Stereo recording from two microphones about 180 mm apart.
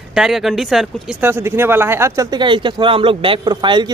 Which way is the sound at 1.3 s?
15° right (ahead or behind).